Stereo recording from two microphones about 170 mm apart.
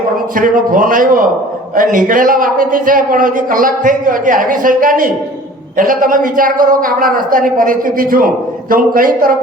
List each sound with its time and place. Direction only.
0.3 s a man's voice: 50° right (ahead or behind)